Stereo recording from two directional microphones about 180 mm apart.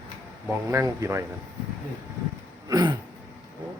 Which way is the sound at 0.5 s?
15° right (ahead or behind).